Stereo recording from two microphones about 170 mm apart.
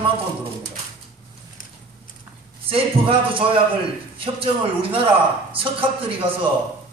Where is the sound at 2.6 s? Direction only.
35° right (ahead or behind).